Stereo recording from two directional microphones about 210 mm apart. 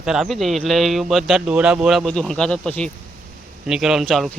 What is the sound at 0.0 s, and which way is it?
Speech, centre (ahead or behind).